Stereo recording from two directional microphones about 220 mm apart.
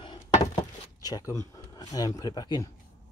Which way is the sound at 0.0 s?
20° left (ahead or behind).